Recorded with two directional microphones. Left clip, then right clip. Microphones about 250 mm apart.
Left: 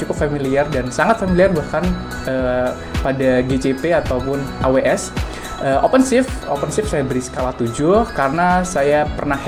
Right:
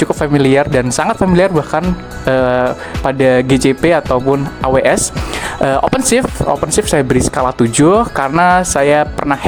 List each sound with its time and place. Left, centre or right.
0.1 s speech: right